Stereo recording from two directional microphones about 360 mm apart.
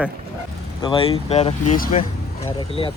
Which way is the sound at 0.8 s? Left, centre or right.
Centre.